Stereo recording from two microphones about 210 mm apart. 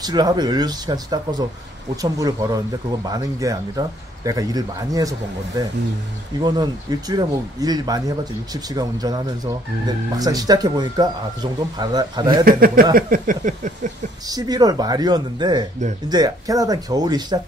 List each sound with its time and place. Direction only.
0.0 s speech: 20° right (ahead or behind)
6.4 s speech: 20° right (ahead or behind)
12.4 s speech: 45° right (ahead or behind)
12.9 s a sound: 40° right (ahead or behind)
14.3 s speech: 20° right (ahead or behind)